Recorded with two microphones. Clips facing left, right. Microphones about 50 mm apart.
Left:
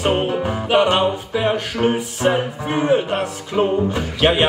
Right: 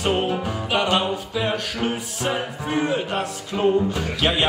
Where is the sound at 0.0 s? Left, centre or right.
Left.